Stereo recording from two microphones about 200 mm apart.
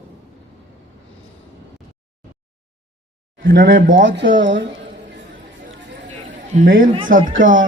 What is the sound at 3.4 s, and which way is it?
Speech, 45° right (ahead or behind).